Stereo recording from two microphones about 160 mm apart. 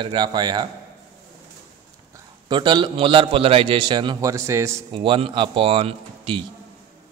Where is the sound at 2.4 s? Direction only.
30° right (ahead or behind).